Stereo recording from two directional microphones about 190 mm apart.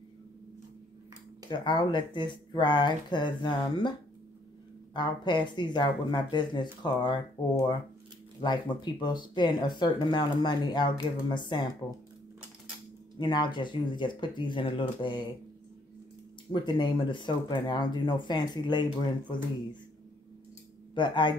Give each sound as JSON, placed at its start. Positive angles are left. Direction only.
{"t": 1.5, "sound": "speech", "side_deg": 25}
{"t": 4.9, "sound": "speech", "side_deg": 25}
{"t": 13.2, "sound": "speech", "side_deg": 25}
{"t": 16.5, "sound": "speech", "side_deg": 25}
{"t": 20.9, "sound": "speech", "side_deg": 25}